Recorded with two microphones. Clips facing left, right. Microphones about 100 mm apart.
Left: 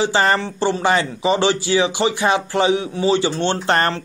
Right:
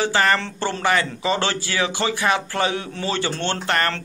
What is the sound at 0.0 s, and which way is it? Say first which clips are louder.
Speech: left 2 dB; 20° left (ahead or behind).